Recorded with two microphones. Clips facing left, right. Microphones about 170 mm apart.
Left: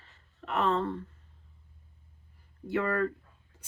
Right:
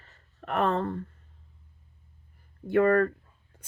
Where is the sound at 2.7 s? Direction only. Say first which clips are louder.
Right 7 dB; 50° right (ahead or behind).